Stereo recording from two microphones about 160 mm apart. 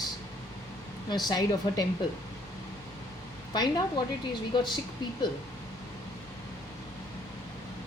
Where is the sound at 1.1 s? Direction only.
25° left (ahead or behind).